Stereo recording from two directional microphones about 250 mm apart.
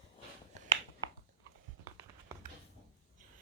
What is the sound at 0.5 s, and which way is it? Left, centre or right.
Finger snapping, right.